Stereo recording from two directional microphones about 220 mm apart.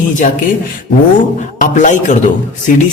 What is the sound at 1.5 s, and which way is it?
Speech, 35° left (ahead or behind).